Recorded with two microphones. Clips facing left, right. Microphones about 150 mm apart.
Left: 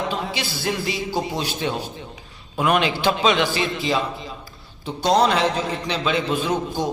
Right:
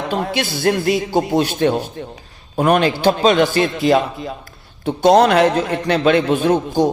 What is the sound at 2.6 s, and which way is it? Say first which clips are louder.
A man's voice: right 5 dB; 45° right (ahead or behind).